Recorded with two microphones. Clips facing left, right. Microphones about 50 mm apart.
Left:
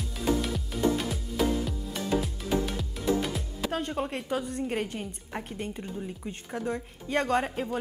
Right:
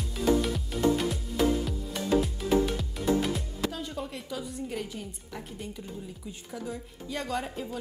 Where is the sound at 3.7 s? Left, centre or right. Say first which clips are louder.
Left 8 dB; left.